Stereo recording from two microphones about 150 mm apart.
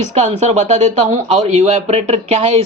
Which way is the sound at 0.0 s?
50° right (ahead or behind).